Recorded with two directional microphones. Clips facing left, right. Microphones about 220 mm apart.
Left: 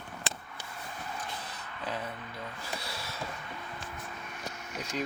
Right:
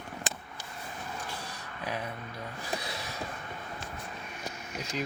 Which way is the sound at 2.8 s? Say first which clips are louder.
Right 2 dB; 20° right (ahead or behind).